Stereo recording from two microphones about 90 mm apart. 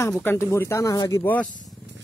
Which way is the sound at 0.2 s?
25° left (ahead or behind).